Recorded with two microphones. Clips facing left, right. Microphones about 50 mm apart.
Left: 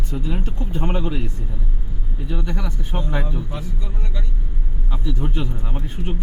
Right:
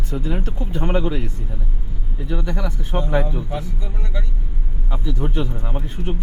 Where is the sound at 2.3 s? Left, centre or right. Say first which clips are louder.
Right 2 dB; right.